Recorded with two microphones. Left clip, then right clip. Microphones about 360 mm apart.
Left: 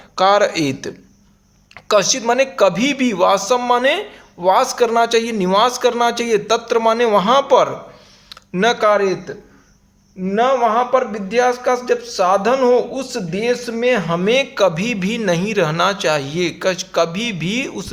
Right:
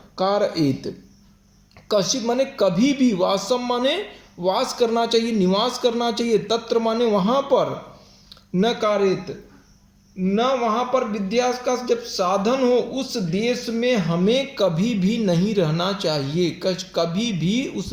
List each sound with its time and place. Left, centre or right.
0.2 s speech: left
10.3 s speech: centre